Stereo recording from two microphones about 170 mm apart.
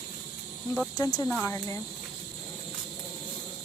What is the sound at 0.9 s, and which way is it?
Speech, 20° left (ahead or behind).